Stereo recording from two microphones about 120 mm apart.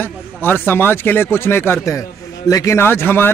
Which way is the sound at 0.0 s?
15° left (ahead or behind).